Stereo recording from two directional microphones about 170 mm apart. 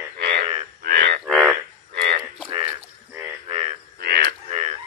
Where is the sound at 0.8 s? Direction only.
55° right (ahead or behind).